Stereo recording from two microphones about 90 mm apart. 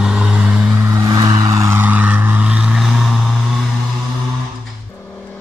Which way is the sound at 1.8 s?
20° right (ahead or behind).